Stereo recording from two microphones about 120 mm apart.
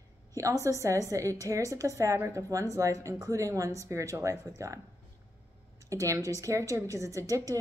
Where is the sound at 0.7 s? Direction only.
25° right (ahead or behind).